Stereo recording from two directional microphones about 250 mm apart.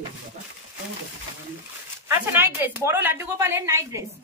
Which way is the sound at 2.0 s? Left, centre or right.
Centre.